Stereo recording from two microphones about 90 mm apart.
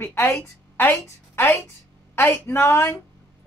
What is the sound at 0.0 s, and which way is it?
A woman's voice, 25° left (ahead or behind).